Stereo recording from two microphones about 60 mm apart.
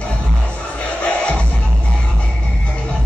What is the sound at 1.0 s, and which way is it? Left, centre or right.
Music, left.